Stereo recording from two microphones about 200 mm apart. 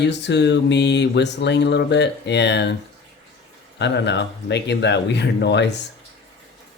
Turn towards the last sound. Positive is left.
turn(degrees=60)  # may be behind; listen again after turning